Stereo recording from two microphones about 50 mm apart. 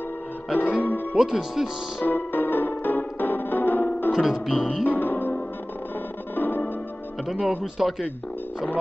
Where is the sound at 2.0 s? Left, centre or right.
Left.